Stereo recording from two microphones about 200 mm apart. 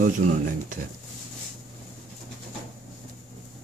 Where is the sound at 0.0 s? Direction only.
40° right (ahead or behind).